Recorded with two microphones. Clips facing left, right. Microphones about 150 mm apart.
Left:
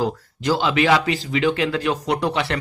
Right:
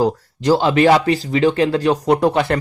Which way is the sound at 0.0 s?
40° right (ahead or behind).